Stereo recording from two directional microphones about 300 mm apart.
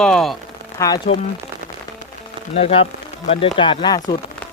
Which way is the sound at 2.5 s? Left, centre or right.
Centre.